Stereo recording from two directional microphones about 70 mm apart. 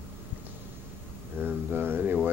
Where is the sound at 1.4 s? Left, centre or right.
Right.